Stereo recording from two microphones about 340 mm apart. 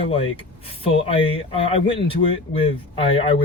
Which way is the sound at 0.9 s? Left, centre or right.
Centre.